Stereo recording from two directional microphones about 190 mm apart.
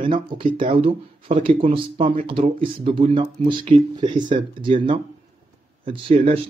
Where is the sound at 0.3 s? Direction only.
25° right (ahead or behind).